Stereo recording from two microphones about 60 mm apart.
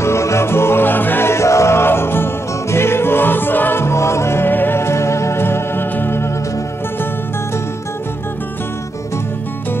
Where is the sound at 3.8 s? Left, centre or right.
Left.